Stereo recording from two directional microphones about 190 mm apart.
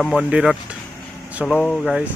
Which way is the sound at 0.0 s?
Centre (ahead or behind).